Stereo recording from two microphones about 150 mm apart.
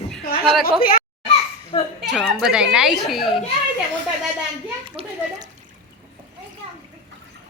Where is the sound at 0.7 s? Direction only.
75° left (ahead or behind).